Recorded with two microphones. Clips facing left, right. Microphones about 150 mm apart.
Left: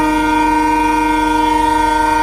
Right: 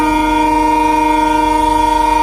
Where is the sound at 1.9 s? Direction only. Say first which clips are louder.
Right 1 dB; 20° right (ahead or behind).